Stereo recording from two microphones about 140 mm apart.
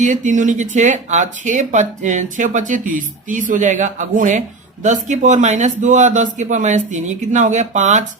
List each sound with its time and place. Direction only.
0.0 s speech: 65° right (ahead or behind)